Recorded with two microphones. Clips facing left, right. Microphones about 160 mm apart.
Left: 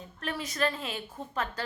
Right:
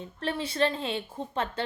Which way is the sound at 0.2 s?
30° right (ahead or behind).